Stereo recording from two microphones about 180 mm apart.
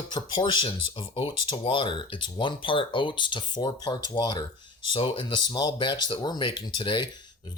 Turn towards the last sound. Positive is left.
turn(degrees=25)  # may be behind; listen again after turning